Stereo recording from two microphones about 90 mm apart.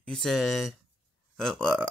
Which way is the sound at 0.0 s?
5° left (ahead or behind).